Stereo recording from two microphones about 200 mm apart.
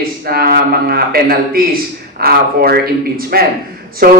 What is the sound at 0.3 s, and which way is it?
A man's voice, 50° right (ahead or behind).